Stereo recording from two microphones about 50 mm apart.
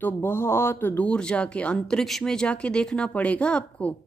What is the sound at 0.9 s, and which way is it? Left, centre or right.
Speech, left.